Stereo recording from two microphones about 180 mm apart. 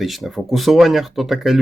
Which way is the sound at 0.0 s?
Centre (ahead or behind).